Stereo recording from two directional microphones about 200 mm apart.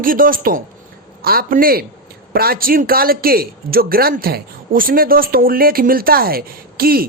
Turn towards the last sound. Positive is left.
turn(degrees=-50)  # may be behind; listen again after turning